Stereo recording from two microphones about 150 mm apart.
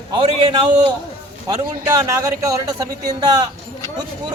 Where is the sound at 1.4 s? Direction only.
25° right (ahead or behind).